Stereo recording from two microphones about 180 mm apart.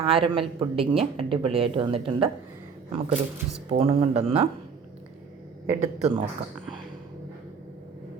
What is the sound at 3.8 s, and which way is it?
Speech, 35° right (ahead or behind).